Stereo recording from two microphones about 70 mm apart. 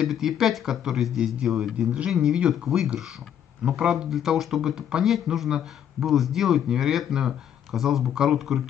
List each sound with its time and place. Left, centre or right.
0.0 s speech: centre